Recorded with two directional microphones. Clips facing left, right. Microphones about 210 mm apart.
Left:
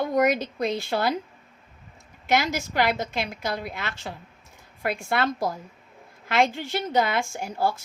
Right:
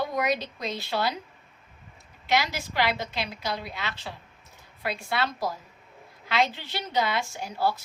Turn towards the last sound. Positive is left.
turn(degrees=50)  # may be behind; listen again after turning